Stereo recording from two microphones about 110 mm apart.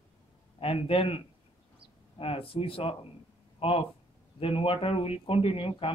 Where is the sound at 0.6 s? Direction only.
60° left (ahead or behind).